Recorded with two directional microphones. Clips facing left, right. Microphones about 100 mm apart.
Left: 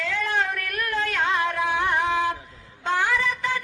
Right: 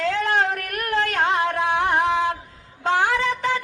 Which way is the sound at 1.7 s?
70° right (ahead or behind).